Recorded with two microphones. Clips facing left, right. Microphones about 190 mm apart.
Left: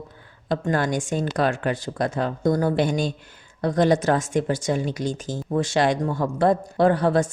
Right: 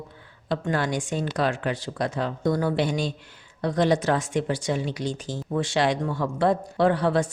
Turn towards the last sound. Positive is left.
turn(degrees=45)  # may be behind; listen again after turning